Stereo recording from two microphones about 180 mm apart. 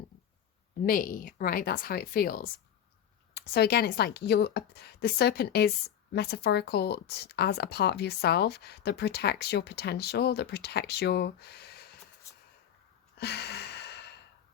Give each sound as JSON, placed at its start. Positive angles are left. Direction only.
{"t": 0.9, "sound": "speech", "side_deg": 50}
{"t": 13.1, "sound": "gasp", "side_deg": 65}